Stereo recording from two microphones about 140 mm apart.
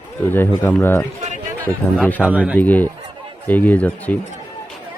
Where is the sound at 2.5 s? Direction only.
10° left (ahead or behind).